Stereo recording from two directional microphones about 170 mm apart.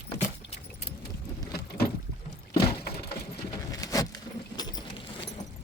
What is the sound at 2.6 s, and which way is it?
Wood, 70° left (ahead or behind).